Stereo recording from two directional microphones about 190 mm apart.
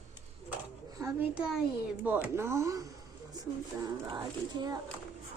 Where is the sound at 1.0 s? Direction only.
15° right (ahead or behind).